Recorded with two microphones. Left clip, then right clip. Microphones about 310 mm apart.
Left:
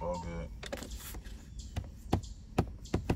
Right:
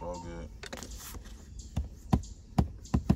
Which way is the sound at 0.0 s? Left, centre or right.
Centre.